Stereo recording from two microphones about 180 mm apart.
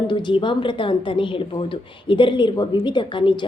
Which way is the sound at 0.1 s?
25° left (ahead or behind).